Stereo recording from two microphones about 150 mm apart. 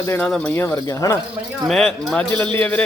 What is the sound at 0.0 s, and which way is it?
Speech, 20° left (ahead or behind).